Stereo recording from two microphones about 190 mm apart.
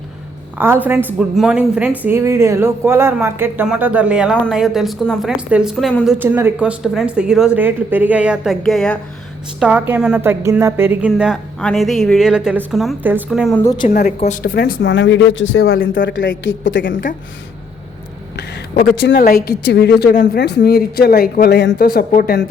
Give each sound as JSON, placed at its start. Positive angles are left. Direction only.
{"t": 0.6, "sound": "speech", "side_deg": -10}
{"t": 6.1, "sound": "speech", "side_deg": -10}
{"t": 11.1, "sound": "speech", "side_deg": 0}
{"t": 13.8, "sound": "speech", "side_deg": 40}
{"t": 16.9, "sound": "speech", "side_deg": 45}
{"t": 18.3, "sound": "speech", "side_deg": 55}